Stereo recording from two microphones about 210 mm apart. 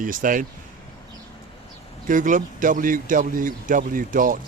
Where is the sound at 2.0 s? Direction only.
40° right (ahead or behind).